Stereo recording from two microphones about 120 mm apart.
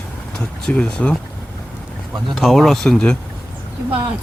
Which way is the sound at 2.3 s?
Centre (ahead or behind).